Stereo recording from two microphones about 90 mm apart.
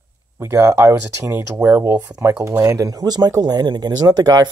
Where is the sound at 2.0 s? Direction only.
35° right (ahead or behind).